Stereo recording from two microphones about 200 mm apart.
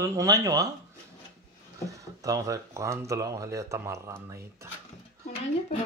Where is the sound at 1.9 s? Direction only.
15° right (ahead or behind).